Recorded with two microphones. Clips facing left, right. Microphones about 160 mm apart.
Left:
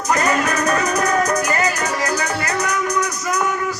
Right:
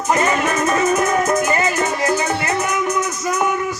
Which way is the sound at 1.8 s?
20° right (ahead or behind).